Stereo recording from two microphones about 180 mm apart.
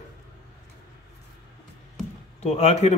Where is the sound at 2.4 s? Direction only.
35° left (ahead or behind).